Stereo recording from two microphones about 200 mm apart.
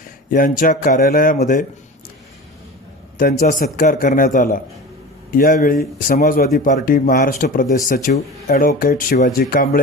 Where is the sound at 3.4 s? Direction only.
40° left (ahead or behind).